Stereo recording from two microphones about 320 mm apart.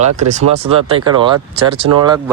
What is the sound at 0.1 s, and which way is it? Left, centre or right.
Speech, right.